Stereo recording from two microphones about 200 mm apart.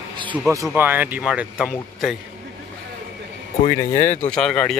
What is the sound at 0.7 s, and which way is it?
Speech, 10° right (ahead or behind).